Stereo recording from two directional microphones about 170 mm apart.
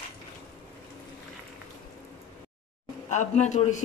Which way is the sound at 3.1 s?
45° left (ahead or behind).